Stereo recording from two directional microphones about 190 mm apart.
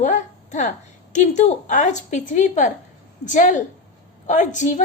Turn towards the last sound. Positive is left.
turn(degrees=40)  # may be behind; listen again after turning